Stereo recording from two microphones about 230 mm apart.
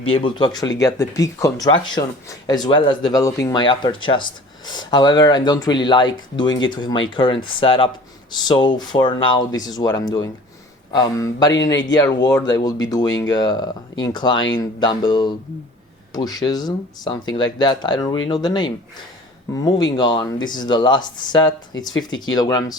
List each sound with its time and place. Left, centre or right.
0.0 s speech: left